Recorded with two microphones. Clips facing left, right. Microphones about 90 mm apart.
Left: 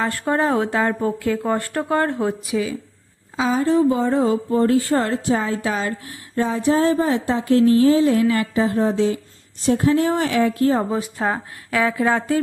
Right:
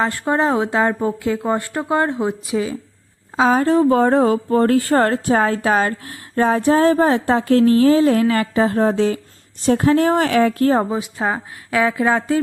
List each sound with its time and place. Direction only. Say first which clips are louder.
0.0 s a woman's voice: right 2 dB; 25° right (ahead or behind)
3.3 s a woman's voice: right 5 dB; 45° right (ahead or behind)
3.6 s speech: even; 65° right (ahead or behind)
10.8 s speech: right 1 dB; 10° right (ahead or behind)
11.7 s a woman's voice: right 2 dB; 25° right (ahead or behind)